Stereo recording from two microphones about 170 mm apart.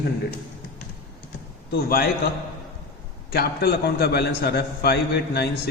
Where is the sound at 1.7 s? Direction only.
65° left (ahead or behind).